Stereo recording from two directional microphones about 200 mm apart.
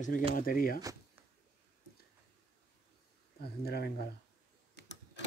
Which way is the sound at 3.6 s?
50° left (ahead or behind).